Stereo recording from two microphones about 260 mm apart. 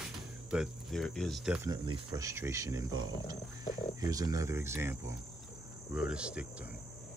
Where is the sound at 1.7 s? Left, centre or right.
Centre.